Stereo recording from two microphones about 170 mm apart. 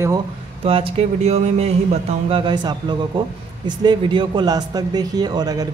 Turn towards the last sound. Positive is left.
turn(degrees=-20)  # may be behind; listen again after turning